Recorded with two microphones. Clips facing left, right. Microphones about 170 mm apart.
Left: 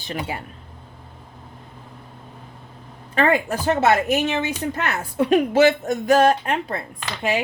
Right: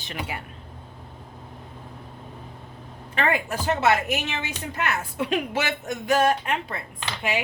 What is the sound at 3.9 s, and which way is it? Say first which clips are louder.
Speech: left 4 dB; 45° left (ahead or behind).